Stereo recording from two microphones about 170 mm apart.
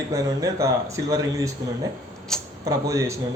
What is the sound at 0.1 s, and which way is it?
A man's voice, 20° right (ahead or behind).